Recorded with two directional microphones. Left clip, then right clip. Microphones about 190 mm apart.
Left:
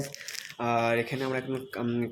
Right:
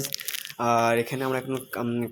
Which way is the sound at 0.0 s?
50° right (ahead or behind).